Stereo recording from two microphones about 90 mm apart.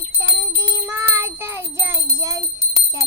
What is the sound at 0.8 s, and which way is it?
Music, 25° right (ahead or behind).